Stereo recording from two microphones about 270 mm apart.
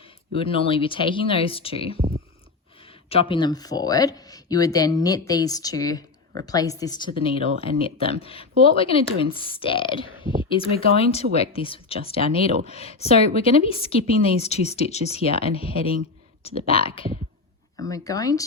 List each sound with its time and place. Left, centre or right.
0.3 s speech: left
3.1 s speech: centre